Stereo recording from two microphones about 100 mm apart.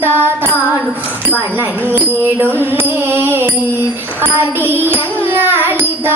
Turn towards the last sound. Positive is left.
turn(degrees=-20)  # may be behind; listen again after turning